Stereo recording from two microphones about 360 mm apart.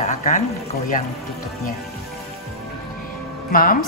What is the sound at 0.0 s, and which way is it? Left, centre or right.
Speech, centre.